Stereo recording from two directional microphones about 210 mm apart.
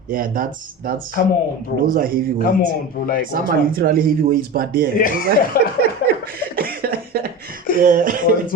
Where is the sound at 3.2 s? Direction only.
40° right (ahead or behind).